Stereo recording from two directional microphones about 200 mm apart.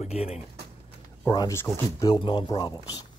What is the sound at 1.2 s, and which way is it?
Speech, 20° left (ahead or behind).